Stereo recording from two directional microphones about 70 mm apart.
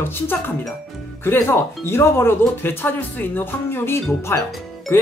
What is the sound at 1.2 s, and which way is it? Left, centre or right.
Speech, left.